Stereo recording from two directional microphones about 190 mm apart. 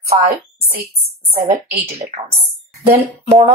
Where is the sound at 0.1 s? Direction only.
30° right (ahead or behind).